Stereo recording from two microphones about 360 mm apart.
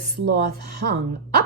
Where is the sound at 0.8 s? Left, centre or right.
Right.